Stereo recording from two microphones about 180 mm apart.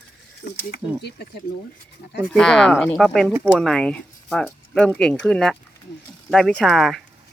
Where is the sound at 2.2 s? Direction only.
5° left (ahead or behind).